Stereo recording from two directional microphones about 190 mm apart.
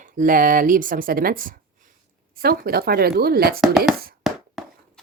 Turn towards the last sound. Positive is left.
turn(degrees=0)  # may be behind; listen again after turning